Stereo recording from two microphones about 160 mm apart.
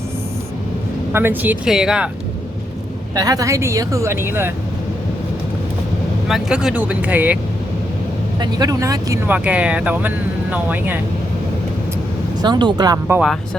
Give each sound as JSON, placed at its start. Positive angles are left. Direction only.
{"t": 1.1, "sound": "speech", "side_deg": -10}
{"t": 3.2, "sound": "speech", "side_deg": -20}
{"t": 6.2, "sound": "speech", "side_deg": -5}
{"t": 8.4, "sound": "speech", "side_deg": -25}
{"t": 12.4, "sound": "speech", "side_deg": -30}